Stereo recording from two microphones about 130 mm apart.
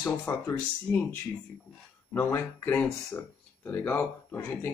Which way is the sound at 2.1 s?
15° left (ahead or behind).